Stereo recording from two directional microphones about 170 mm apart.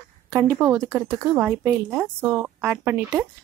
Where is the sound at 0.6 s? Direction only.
20° right (ahead or behind).